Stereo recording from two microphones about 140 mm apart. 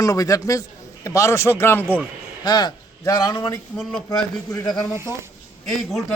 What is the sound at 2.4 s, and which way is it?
A man's voice, 30° left (ahead or behind).